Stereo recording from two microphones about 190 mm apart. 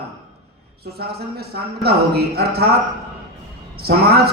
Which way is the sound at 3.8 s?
55° right (ahead or behind).